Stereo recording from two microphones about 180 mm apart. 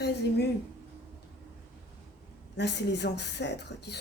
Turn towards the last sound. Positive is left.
turn(degrees=70)  # may be behind; listen again after turning